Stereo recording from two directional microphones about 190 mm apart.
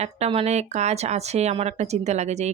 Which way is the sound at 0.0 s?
35° right (ahead or behind).